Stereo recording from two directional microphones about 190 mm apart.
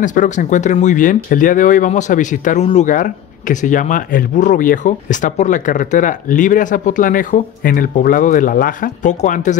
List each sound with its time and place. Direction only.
0.0 s speech: 45° left (ahead or behind)